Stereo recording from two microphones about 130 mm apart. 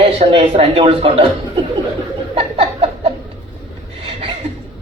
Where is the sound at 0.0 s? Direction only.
45° right (ahead or behind).